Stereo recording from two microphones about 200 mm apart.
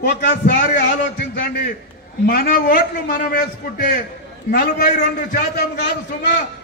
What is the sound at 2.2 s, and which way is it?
Speech, 45° left (ahead or behind).